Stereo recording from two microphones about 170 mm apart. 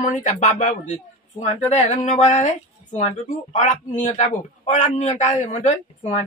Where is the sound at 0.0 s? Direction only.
45° left (ahead or behind).